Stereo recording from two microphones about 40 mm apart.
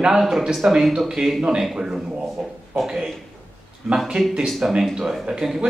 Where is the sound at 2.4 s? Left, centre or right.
Centre.